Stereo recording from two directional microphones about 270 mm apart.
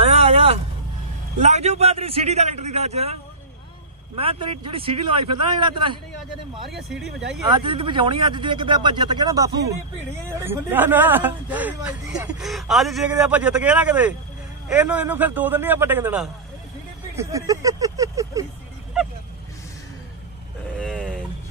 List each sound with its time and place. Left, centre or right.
0.0 s vehicle: right
1.4 s a man's voice: right
4.2 s a man's voice: centre
6.7 s speech: centre
7.4 s speech: centre
20.7 s a sound: centre